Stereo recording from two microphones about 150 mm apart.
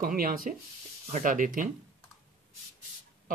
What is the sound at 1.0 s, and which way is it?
Speech, 55° right (ahead or behind).